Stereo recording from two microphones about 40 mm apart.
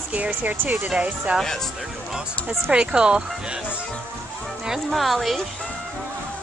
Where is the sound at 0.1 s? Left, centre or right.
Right.